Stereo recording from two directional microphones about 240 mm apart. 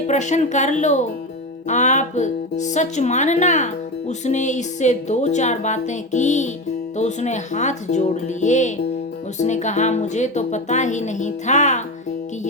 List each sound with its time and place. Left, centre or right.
0.1 s speech: left